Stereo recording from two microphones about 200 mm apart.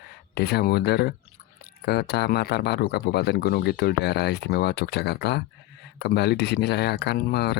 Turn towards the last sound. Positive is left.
turn(degrees=55)  # may be behind; listen again after turning